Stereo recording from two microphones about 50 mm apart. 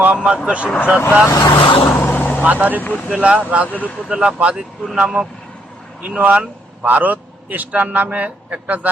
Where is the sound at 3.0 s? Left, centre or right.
Centre.